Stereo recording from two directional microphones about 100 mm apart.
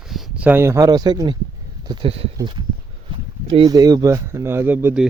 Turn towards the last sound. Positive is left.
turn(degrees=-20)  # may be behind; listen again after turning